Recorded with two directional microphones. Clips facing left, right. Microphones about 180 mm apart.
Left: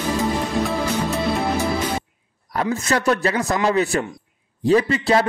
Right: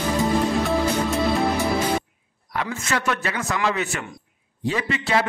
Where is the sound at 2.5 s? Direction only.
35° left (ahead or behind).